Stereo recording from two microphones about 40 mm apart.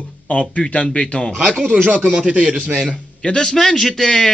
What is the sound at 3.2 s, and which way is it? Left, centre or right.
A man's voice, centre.